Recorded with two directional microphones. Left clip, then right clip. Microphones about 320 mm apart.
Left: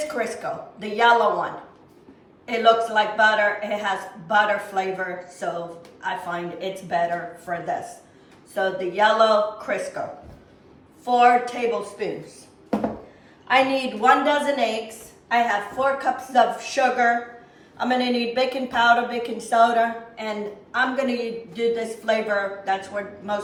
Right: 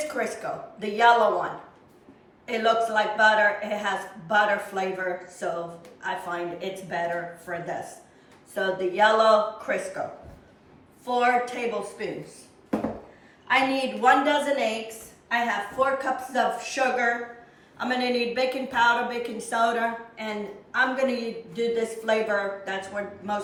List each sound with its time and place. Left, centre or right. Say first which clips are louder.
0.4 s speech: left 2 dB; centre
2.5 s speech: left 5 dB; centre
11.0 s a woman's voice: left 6 dB; centre
13.5 s a woman's voice: left 3 dB; centre
20.7 s speech: left 1 dB; centre